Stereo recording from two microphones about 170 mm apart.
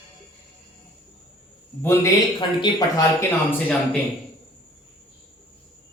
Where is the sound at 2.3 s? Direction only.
25° left (ahead or behind).